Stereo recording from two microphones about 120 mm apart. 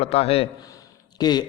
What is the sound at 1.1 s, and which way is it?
Speech, 35° left (ahead or behind).